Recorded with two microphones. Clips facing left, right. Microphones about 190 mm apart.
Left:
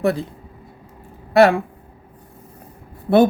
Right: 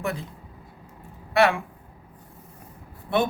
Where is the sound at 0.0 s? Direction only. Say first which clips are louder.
Left 10 dB; 35° left (ahead or behind).